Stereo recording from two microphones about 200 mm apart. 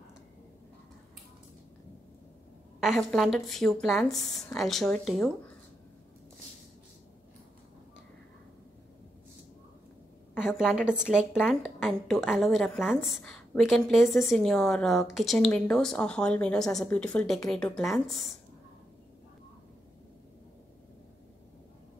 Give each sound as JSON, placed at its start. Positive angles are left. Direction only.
{"t": 3.0, "sound": "speech", "side_deg": 0}
{"t": 10.3, "sound": "a woman's voice", "side_deg": -5}
{"t": 14.0, "sound": "speech", "side_deg": 15}
{"t": 14.3, "sound": "speech", "side_deg": 0}